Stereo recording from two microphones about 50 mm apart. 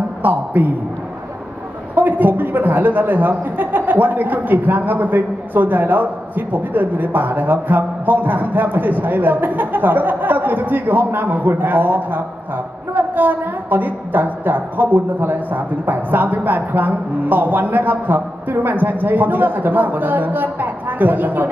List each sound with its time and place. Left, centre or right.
0.2 s a man's voice: right
2.0 s a man's voice: right